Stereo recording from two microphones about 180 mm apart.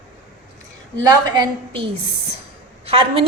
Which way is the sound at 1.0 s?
20° right (ahead or behind).